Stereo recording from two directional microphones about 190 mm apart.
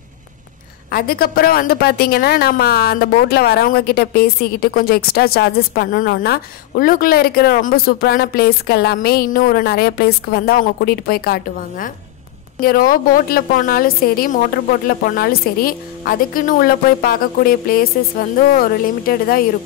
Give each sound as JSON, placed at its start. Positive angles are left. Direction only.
{"t": 0.9, "sound": "a woman's voice", "side_deg": 50}